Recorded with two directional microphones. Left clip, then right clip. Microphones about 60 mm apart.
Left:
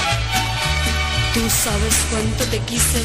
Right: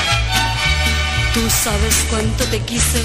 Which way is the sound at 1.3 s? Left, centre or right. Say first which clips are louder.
Right 2 dB; centre.